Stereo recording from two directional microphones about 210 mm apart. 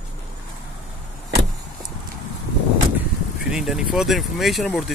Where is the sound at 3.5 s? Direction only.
5° right (ahead or behind).